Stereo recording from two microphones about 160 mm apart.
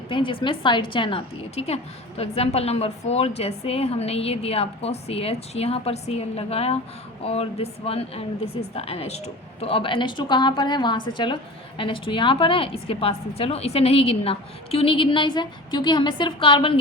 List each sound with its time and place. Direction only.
0.1 s a woman's voice: 30° left (ahead or behind)